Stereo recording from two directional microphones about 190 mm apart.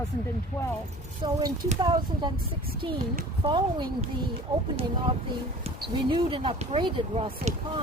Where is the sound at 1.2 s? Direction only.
20° right (ahead or behind).